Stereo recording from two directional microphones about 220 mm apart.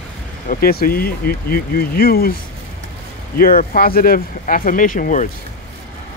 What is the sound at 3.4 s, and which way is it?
Speech, 40° left (ahead or behind).